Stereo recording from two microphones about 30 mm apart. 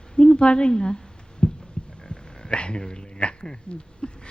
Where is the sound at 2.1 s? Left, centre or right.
Left.